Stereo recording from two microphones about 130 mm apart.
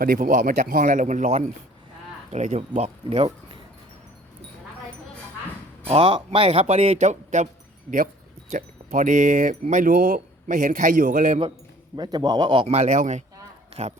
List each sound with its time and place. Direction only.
0.0 s speech: 90° right; by 3.2 s 55° right (ahead or behind)
5.9 s speech: 45° right (ahead or behind); by 7.4 s 70° right (ahead or behind)
7.9 s speech: 90° right; by 11.3 s 70° right (ahead or behind)
11.9 s a man's voice: 30° right (ahead or behind)
12.6 s speech: 60° right (ahead or behind)